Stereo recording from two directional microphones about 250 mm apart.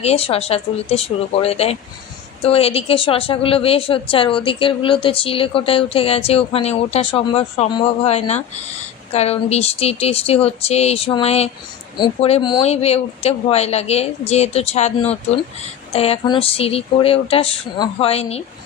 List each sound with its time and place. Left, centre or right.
0.0 s a woman's voice: left